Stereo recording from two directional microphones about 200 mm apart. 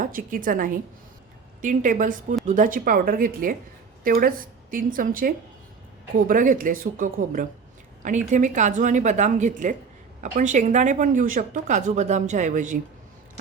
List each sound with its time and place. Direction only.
0.0 s a woman's voice: 45° right (ahead or behind)